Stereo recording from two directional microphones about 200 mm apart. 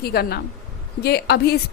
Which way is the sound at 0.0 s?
50° left (ahead or behind).